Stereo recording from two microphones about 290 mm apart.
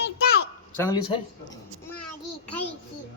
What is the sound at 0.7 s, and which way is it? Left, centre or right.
Speech, centre.